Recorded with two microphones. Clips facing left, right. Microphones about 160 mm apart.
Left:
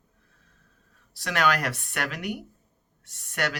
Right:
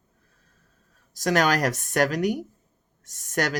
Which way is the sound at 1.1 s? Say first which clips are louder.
Right 4 dB; 40° right (ahead or behind).